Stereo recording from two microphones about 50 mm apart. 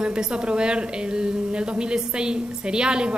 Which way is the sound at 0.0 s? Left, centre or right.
Centre.